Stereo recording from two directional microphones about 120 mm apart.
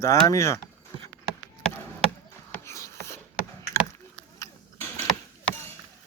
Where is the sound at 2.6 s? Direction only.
25° left (ahead or behind).